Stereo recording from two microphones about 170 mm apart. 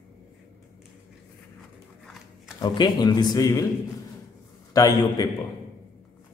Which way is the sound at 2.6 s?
25° left (ahead or behind).